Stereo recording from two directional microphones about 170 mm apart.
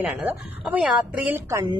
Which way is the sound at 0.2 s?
5° right (ahead or behind).